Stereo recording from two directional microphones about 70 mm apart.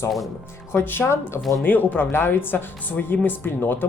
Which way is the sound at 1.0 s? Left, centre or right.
Left.